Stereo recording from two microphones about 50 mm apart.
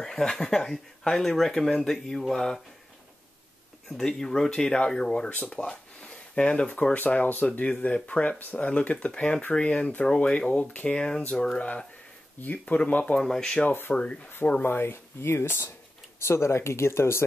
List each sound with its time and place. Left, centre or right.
0.0 s speech: centre
4.1 s speech: centre
5.3 s speech: left
5.7 s a sound: centre
6.7 s speech: left
12.4 s speech: left
13.2 s speech: centre
13.7 s speech: left
13.9 s speech: left
14.6 s speech: left
16.2 s speech: left